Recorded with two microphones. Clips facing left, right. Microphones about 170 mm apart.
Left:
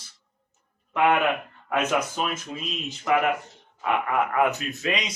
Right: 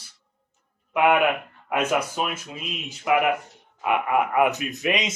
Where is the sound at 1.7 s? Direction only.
10° right (ahead or behind).